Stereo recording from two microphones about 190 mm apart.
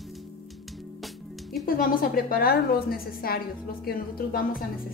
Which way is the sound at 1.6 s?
45° left (ahead or behind).